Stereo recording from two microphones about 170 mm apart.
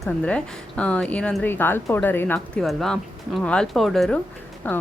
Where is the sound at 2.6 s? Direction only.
Centre (ahead or behind).